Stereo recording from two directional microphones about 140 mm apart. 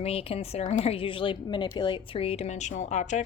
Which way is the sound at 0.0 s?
45° left (ahead or behind).